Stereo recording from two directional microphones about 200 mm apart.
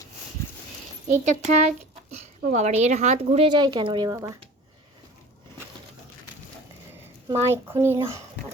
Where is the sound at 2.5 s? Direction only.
35° right (ahead or behind); by 4.3 s 20° right (ahead or behind).